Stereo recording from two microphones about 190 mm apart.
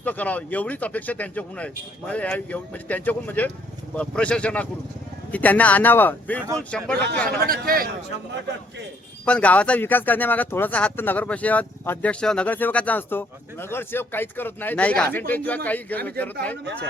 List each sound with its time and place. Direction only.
0.0 s speech: 10° left (ahead or behind)
7.3 s speech: 50° right (ahead or behind)
9.2 s speech: 5° left (ahead or behind)